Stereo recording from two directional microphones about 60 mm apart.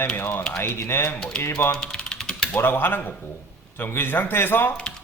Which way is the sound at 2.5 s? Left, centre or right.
Left.